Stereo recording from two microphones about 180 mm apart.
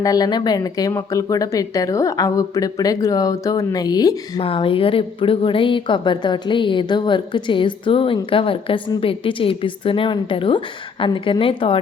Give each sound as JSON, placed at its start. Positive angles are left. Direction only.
{"t": 0.0, "sound": "speech", "side_deg": 20}